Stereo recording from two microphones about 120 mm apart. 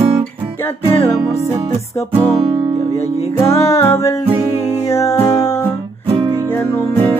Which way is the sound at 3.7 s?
20° left (ahead or behind).